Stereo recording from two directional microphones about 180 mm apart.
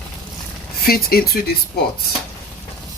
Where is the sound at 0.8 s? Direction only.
55° left (ahead or behind).